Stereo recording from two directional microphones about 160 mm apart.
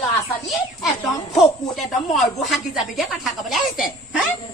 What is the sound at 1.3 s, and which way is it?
A woman's voice, centre (ahead or behind).